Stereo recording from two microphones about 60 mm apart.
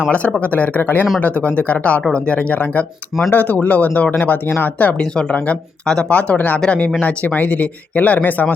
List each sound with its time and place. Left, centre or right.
0.3 s speech: left
4.9 s speech: centre